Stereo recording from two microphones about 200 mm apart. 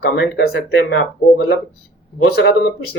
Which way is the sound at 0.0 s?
55° left (ahead or behind).